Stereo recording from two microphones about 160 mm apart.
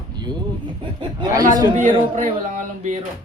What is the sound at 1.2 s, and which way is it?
Speech, 20° right (ahead or behind).